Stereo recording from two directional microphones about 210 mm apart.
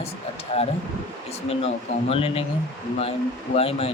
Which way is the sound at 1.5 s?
25° left (ahead or behind).